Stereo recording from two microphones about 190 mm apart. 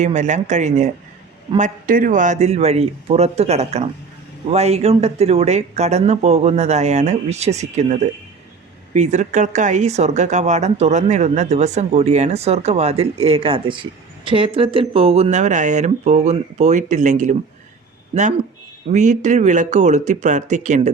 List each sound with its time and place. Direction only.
0.0 s speech: 40° right (ahead or behind)